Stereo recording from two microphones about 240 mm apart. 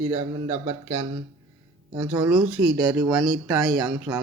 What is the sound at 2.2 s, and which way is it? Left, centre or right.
Speech, centre.